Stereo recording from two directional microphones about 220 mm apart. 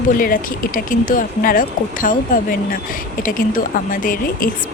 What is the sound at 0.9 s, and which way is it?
Speech, 40° left (ahead or behind).